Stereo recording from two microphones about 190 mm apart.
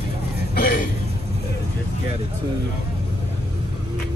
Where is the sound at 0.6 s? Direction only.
45° left (ahead or behind).